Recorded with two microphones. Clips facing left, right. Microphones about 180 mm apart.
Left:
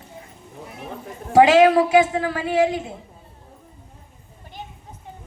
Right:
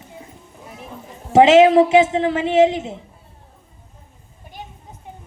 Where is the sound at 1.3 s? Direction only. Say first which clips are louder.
Right 3 dB; 25° right (ahead or behind).